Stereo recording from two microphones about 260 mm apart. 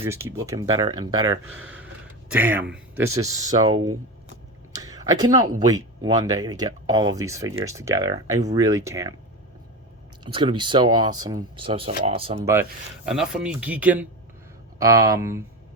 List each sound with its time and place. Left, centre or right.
0.0 s speech: centre
1.6 s a sound: centre
2.3 s speech: centre
3.7 s speech: centre
4.7 s a sound: centre
5.5 s speech: centre
10.2 s speech: centre
13.1 s speech: centre